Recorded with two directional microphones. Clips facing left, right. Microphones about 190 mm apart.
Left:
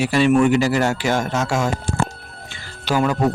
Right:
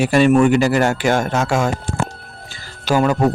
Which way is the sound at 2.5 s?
45° right (ahead or behind).